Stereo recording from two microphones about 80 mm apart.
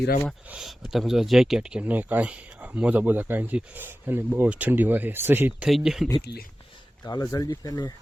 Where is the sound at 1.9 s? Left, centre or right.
Right.